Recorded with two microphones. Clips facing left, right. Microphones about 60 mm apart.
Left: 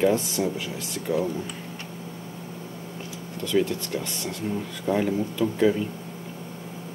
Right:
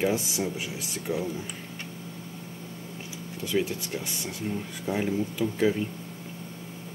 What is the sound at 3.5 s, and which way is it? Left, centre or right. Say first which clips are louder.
Speech: left 4 dB; centre.